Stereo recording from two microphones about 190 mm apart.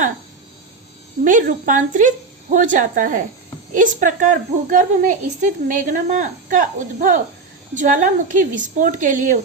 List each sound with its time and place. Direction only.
1.2 s speech: 45° right (ahead or behind)